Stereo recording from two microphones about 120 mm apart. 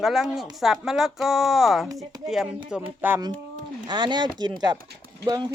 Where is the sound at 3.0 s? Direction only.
15° right (ahead or behind).